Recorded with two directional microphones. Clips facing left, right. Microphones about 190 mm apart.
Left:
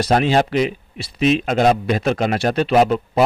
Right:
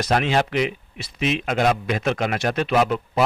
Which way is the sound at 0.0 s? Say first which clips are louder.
Left 4 dB; 35° left (ahead or behind).